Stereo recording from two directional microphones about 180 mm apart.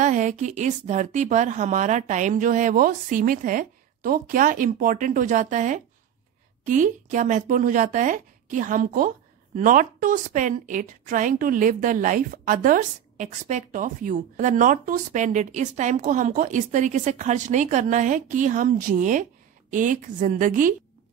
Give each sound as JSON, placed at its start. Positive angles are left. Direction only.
{"t": 0.0, "sound": "a woman's voice", "side_deg": -45}